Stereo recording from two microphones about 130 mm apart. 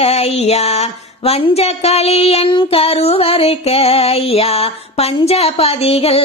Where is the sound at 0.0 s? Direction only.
50° left (ahead or behind).